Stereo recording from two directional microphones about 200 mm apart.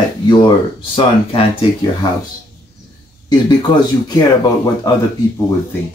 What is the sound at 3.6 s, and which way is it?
Speech, 20° left (ahead or behind).